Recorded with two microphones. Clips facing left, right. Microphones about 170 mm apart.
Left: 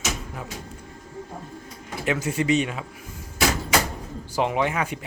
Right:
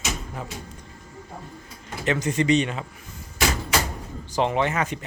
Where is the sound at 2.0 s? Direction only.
5° left (ahead or behind).